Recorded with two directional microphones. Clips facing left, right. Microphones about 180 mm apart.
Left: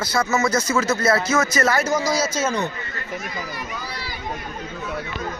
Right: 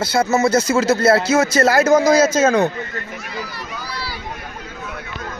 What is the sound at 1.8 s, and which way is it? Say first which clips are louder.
Speech: right 9 dB; 50° right (ahead or behind).